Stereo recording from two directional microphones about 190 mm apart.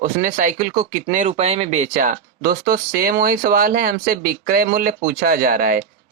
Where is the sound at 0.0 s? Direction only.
45° right (ahead or behind).